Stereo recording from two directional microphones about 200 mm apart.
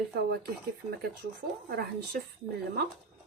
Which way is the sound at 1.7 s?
50° right (ahead or behind).